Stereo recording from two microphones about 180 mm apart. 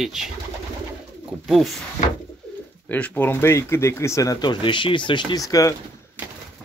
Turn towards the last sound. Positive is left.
turn(degrees=20)  # may be behind; listen again after turning